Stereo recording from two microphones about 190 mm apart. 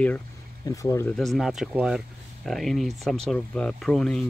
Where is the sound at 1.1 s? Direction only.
Centre (ahead or behind).